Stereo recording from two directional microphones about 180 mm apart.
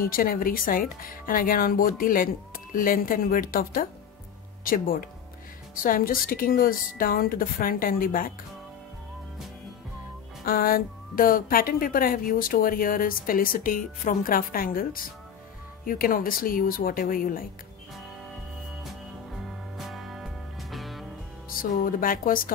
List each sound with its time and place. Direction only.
0.0 s speech: 50° left (ahead or behind)
10.4 s speech: 55° left (ahead or behind)
19.3 s music: centre (ahead or behind)
21.5 s speech: 50° left (ahead or behind)